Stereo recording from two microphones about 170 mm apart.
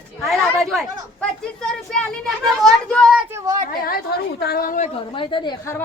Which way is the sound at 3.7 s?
60° left (ahead or behind).